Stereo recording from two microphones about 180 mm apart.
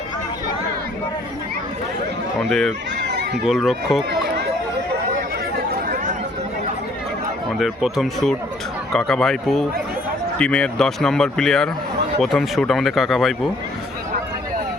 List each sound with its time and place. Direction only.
2.4 s a man's voice: centre (ahead or behind)
3.0 s a sound: 70° right (ahead or behind)
3.4 s a man's voice: centre (ahead or behind)
7.6 s a man's voice: centre (ahead or behind)